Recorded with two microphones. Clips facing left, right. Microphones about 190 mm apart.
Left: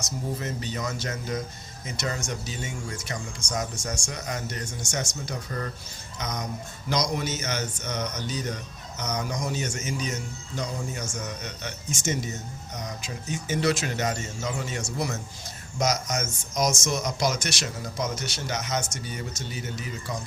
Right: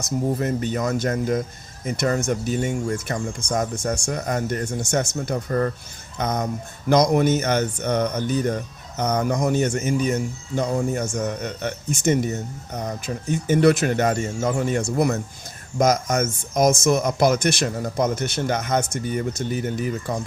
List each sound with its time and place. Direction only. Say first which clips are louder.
0.3 s speech: right 9 dB; 55° right (ahead or behind)